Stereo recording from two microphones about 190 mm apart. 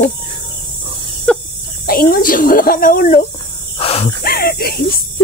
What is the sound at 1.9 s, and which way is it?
Speech, 50° left (ahead or behind).